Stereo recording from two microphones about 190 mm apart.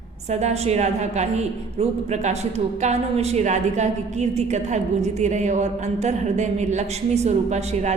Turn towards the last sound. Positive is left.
turn(degrees=-35)  # may be behind; listen again after turning